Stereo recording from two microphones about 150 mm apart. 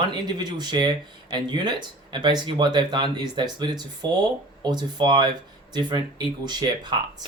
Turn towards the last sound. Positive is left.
turn(degrees=-30)  # may be behind; listen again after turning